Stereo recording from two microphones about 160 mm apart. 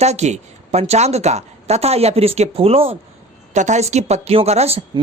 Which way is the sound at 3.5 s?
45° right (ahead or behind).